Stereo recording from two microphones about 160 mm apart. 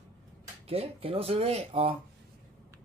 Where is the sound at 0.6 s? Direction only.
40° right (ahead or behind).